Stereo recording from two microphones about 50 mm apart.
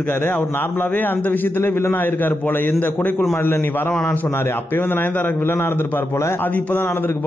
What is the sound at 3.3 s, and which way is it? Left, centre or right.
A man's voice, left.